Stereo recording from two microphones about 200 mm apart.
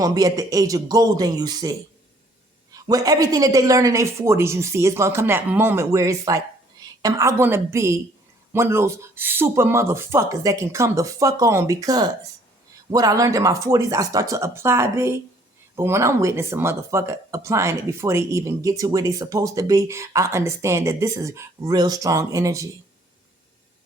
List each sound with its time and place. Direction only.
0.0 s speech: 15° right (ahead or behind)
2.7 s speech: 20° right (ahead or behind)